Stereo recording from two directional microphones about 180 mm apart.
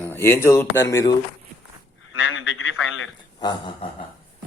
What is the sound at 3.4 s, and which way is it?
Speech, 25° left (ahead or behind).